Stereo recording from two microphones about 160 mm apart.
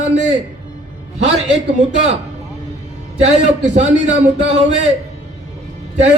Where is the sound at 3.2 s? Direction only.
45° right (ahead or behind).